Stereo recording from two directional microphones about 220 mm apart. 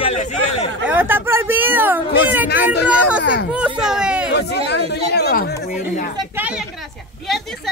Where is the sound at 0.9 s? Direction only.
10° right (ahead or behind).